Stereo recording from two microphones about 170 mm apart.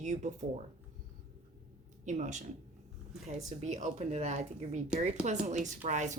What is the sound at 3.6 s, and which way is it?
Speech, 40° right (ahead or behind).